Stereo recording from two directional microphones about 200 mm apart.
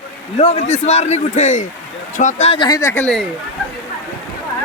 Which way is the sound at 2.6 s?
15° left (ahead or behind).